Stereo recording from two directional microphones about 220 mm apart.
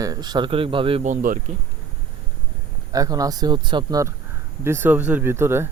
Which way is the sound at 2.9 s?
15° right (ahead or behind).